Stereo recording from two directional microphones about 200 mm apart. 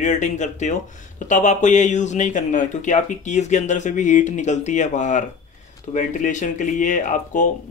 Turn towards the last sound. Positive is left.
turn(degrees=40)  # may be behind; listen again after turning